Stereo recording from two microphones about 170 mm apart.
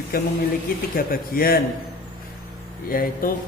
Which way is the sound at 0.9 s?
60° left (ahead or behind).